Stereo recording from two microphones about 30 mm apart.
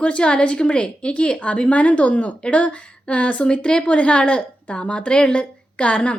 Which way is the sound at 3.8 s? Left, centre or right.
Left.